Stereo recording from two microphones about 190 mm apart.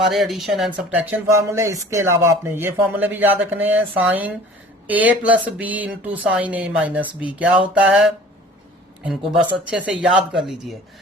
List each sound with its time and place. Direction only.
0.1 s speech: centre (ahead or behind)